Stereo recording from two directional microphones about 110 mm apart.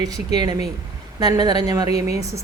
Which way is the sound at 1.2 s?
40° right (ahead or behind).